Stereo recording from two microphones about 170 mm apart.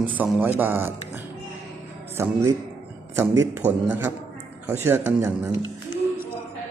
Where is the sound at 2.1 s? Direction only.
15° right (ahead or behind).